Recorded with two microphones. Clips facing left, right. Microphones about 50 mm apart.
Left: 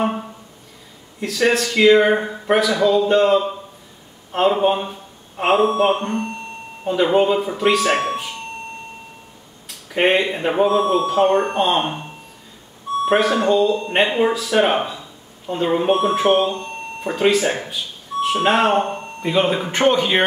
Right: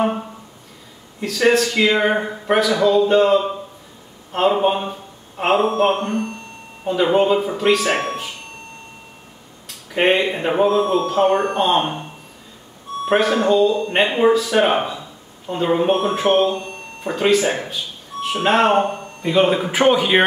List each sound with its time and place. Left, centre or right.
0.0 s a sound: centre
1.2 s a man's voice: centre
9.7 s speech: centre
10.7 s speech: left
11.5 s a man's voice: centre
13.1 s a man's voice: centre
13.7 s speech: left
14.1 s a man's voice: centre